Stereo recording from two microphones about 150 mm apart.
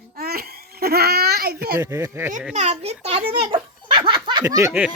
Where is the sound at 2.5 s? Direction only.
50° right (ahead or behind); by 4.8 s 20° right (ahead or behind).